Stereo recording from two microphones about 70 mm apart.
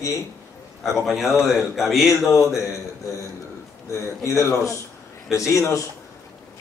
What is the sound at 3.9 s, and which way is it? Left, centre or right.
A man's voice, left.